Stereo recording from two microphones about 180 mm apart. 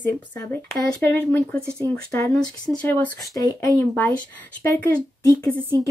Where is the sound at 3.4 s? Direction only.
20° left (ahead or behind).